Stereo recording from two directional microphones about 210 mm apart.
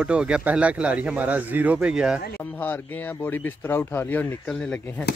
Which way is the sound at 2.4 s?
10° left (ahead or behind).